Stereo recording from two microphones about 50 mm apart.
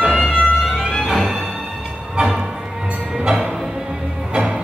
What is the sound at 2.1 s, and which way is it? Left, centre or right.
Music, centre.